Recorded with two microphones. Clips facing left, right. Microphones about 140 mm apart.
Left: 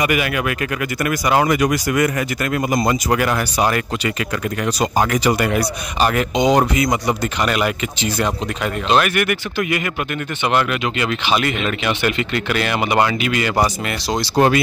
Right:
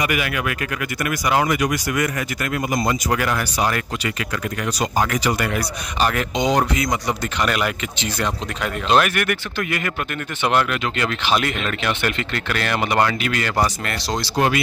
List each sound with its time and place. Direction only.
0.0 s speech: 25° left (ahead or behind)
1.3 s speech: 35° left (ahead or behind); by 14.2 s 15° left (ahead or behind)
14.3 s speech: 35° left (ahead or behind)